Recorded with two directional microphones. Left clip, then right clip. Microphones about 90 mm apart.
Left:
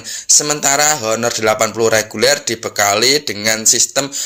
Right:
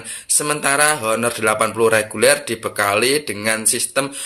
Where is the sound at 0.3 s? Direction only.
35° left (ahead or behind).